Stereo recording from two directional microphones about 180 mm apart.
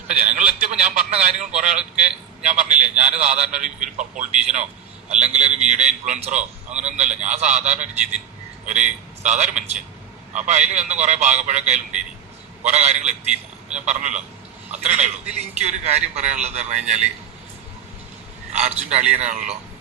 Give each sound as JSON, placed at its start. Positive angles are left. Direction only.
{"t": 0.1, "sound": "a man's voice", "side_deg": -40}
{"t": 18.5, "sound": "a man's voice", "side_deg": -40}